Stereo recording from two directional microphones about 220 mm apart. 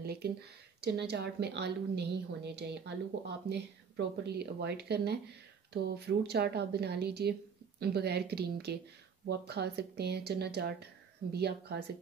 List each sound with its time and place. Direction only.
0.0 s a woman's voice: 45° right (ahead or behind)